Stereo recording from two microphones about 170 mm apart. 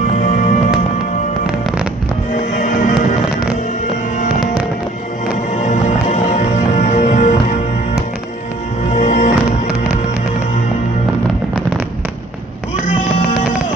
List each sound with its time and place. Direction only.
2.3 s music: 55° left (ahead or behind)
5.6 s music: 45° left (ahead or behind)
8.9 s music: 45° left (ahead or behind)